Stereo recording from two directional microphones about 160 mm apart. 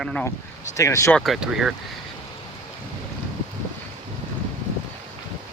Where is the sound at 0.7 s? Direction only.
20° left (ahead or behind).